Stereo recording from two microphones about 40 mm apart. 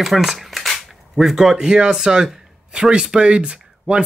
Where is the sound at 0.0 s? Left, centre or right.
Centre.